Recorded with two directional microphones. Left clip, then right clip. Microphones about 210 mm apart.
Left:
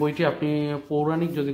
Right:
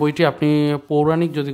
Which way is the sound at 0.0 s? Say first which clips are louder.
Right 6 dB; 40° right (ahead or behind).